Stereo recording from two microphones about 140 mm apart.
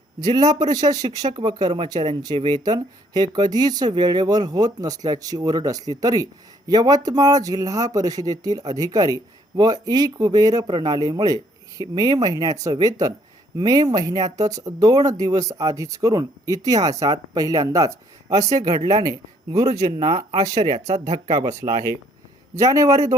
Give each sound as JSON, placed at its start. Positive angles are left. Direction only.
{"t": 0.2, "sound": "speech", "side_deg": -30}